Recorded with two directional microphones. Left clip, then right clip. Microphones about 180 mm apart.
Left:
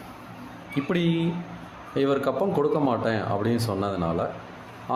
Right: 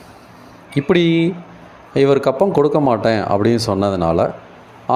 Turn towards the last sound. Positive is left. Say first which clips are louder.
# right 11 dB
turn(degrees=-40)  # may be behind; listen again after turning